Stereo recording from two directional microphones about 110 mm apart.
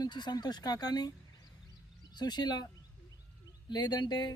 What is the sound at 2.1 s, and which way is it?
Speech, 40° left (ahead or behind).